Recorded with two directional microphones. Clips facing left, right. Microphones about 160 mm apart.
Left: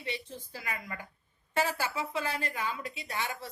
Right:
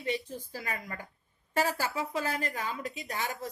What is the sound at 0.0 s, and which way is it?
A woman's voice, 45° right (ahead or behind).